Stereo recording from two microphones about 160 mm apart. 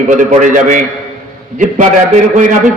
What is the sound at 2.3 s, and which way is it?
Speech, 55° right (ahead or behind).